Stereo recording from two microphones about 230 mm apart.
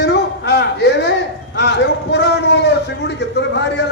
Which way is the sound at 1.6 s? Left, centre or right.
Left.